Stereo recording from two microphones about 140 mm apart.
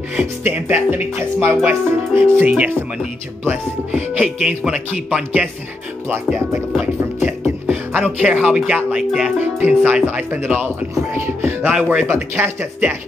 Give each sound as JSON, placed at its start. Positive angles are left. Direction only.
{"t": 0.1, "sound": "speech", "side_deg": -10}
{"t": 6.8, "sound": "speech", "side_deg": -10}
{"t": 11.7, "sound": "speech", "side_deg": -5}